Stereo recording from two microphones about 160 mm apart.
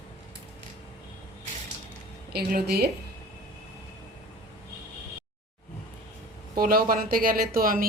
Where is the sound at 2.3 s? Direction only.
85° right.